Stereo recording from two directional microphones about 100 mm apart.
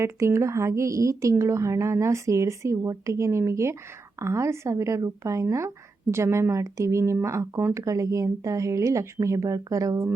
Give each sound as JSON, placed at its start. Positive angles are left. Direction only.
{"t": 0.0, "sound": "a woman's voice", "side_deg": -30}